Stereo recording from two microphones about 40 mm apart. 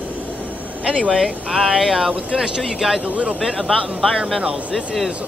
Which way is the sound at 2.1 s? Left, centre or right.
Right.